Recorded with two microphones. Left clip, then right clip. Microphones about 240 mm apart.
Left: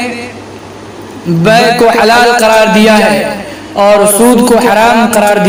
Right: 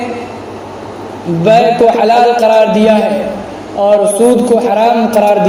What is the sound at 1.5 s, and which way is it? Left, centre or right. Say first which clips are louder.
A man's voice: left 1 dB; left.